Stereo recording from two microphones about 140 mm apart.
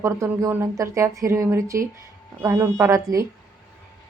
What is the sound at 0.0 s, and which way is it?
Speech, 20° right (ahead or behind).